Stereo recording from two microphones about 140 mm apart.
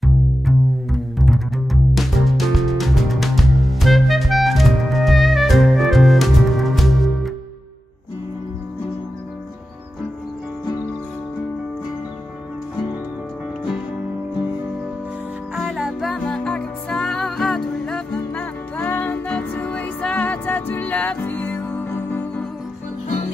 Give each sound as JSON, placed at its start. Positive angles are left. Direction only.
{"t": 0.0, "sound": "music", "side_deg": 0}
{"t": 15.5, "sound": "music", "side_deg": 0}
{"t": 23.0, "sound": "music", "side_deg": 60}